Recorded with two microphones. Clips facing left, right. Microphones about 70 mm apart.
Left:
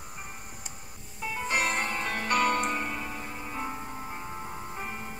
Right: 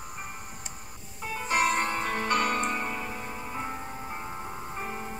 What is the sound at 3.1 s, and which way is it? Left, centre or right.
Music, centre.